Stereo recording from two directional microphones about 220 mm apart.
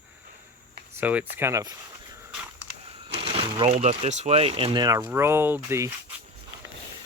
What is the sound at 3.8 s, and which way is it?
Speech, 30° right (ahead or behind).